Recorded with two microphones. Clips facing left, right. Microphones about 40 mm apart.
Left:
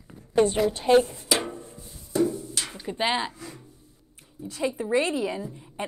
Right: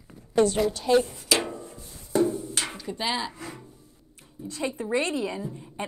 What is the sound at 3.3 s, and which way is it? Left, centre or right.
Speech, right.